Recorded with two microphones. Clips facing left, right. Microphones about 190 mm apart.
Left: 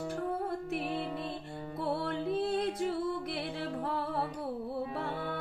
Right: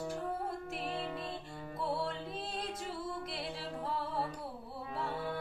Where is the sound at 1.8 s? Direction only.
60° left (ahead or behind).